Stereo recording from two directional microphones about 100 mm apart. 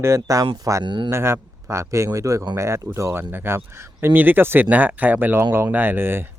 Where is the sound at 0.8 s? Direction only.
50° right (ahead or behind).